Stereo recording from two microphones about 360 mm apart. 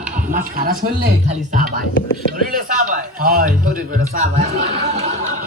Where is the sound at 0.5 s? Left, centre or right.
Right.